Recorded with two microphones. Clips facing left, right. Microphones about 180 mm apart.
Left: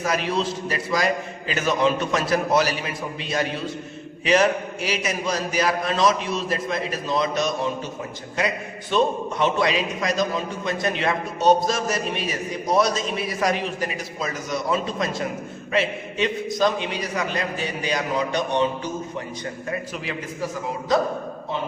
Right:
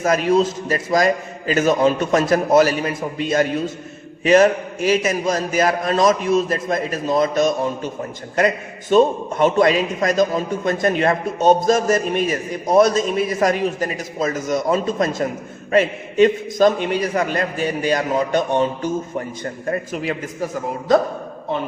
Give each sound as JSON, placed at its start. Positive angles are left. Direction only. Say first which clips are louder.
{"t": 0.0, "sound": "a man's voice", "louder": "right 7 dB", "side_deg": -45}